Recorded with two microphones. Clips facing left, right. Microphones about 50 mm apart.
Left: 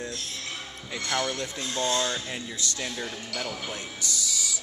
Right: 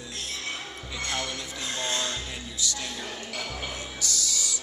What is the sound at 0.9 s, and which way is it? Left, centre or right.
Speech, left.